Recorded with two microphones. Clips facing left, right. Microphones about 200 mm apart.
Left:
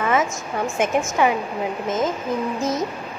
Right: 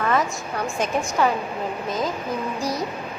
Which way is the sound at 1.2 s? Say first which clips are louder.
Left 1 dB; 15° left (ahead or behind).